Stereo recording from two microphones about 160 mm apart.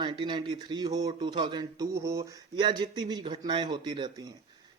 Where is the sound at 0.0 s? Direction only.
30° right (ahead or behind).